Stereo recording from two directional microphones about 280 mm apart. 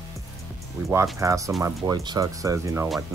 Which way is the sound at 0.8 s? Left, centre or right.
Centre.